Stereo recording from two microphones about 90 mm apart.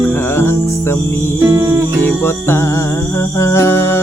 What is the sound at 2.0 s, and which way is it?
Music, 25° left (ahead or behind).